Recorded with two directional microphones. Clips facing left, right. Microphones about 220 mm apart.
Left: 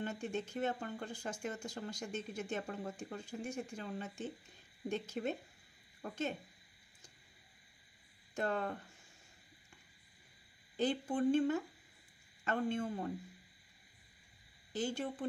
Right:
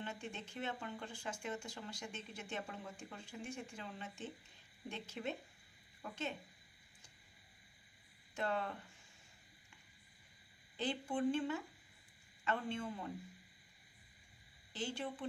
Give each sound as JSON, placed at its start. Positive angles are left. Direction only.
{"t": 0.0, "sound": "speech", "side_deg": 45}
{"t": 8.4, "sound": "speech", "side_deg": 45}
{"t": 10.8, "sound": "speech", "side_deg": 40}
{"t": 14.7, "sound": "speech", "side_deg": 45}